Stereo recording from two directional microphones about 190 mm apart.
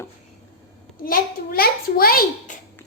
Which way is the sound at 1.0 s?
50° left (ahead or behind).